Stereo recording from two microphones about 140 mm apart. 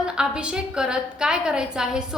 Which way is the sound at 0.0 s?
5° right (ahead or behind).